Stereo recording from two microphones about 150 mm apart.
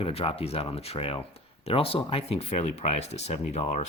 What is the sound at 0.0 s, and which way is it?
Speech, 40° left (ahead or behind).